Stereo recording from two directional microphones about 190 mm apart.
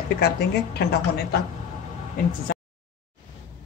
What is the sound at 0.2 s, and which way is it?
A woman's voice, 55° left (ahead or behind).